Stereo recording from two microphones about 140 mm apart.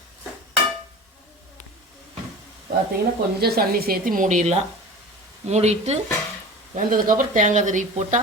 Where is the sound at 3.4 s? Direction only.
90° right; by 6.0 s 50° right (ahead or behind).